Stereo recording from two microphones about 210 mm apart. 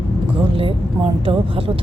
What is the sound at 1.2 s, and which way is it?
Speech, 25° right (ahead or behind).